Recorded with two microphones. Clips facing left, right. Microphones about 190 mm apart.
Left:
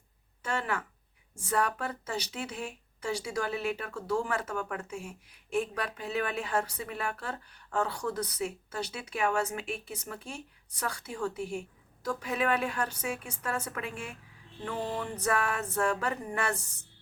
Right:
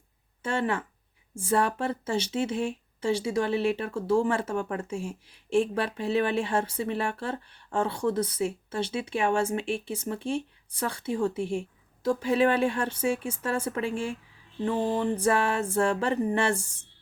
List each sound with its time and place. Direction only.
0.4 s speech: 25° right (ahead or behind)